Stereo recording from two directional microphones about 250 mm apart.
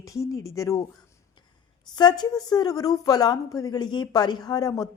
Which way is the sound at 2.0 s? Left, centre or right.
Centre.